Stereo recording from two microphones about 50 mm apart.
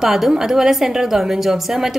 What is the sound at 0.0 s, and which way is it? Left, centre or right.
A woman's voice, centre.